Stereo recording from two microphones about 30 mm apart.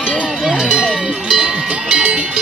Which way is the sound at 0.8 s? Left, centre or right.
Right.